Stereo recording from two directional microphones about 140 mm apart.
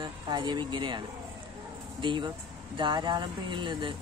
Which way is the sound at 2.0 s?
35° right (ahead or behind).